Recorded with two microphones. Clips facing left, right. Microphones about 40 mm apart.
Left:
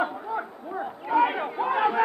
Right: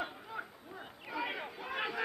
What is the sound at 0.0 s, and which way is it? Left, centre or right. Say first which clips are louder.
Chatter: left 13 dB; left.